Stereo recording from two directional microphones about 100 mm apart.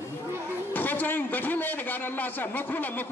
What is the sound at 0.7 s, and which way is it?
A man's voice, 20° left (ahead or behind).